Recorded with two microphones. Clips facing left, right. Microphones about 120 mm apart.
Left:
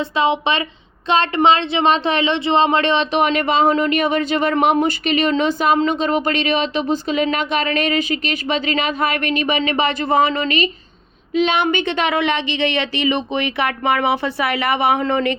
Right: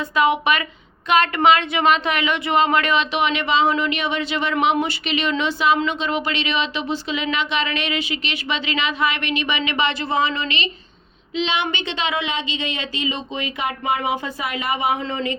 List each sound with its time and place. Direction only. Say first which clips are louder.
0.0 s a woman's voice: left 1 dB; 25° left (ahead or behind); by 15.4 s 65° left (ahead or behind)